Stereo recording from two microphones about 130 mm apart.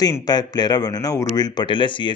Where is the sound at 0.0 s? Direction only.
30° left (ahead or behind).